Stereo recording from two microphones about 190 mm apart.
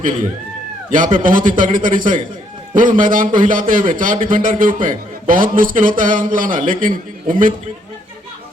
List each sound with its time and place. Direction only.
0.9 s a man's voice: 45° right (ahead or behind)